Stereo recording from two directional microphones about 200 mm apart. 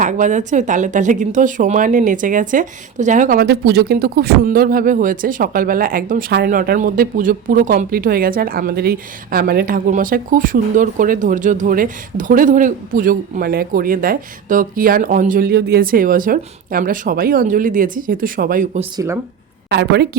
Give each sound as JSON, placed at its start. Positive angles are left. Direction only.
{"t": 0.0, "sound": "a woman's voice", "side_deg": -40}
{"t": 18.9, "sound": "speech", "side_deg": -15}
{"t": 19.7, "sound": "speech", "side_deg": -55}